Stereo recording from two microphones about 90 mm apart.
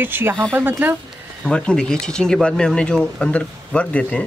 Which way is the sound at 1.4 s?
10° left (ahead or behind).